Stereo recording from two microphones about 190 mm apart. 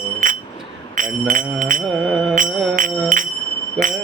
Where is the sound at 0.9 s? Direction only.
45° right (ahead or behind).